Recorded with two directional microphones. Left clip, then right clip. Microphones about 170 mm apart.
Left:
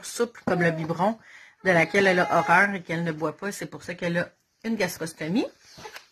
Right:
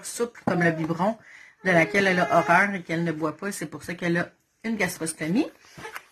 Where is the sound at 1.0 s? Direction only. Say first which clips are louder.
Left 1 dB; 75° left (ahead or behind).